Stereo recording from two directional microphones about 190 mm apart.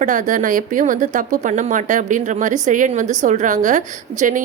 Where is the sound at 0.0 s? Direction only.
40° right (ahead or behind).